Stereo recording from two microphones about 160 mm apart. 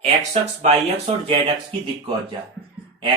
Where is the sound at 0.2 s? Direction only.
40° right (ahead or behind).